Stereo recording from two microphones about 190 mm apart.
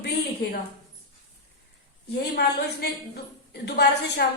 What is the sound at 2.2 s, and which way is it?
A woman's voice, 60° left (ahead or behind).